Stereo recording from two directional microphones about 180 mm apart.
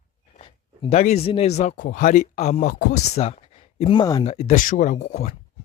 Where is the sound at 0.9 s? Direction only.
35° left (ahead or behind).